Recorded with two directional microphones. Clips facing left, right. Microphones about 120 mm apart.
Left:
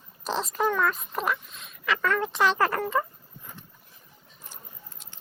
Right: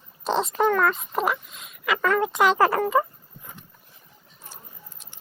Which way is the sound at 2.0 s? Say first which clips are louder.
Right 5 dB; 90° right.